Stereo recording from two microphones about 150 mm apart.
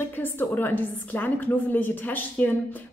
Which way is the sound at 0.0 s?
15° left (ahead or behind).